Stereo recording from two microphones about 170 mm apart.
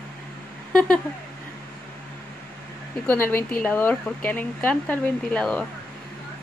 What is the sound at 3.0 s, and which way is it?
Speech, 10° left (ahead or behind).